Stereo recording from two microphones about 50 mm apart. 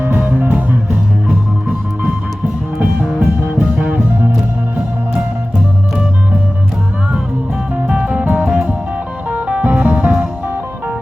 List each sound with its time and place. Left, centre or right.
0.3 s music: right
3.1 s music: centre
3.8 s music: right
7.9 s music: right
8.4 s music: centre